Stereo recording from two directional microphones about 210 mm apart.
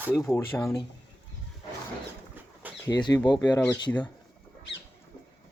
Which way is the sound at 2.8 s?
20° left (ahead or behind).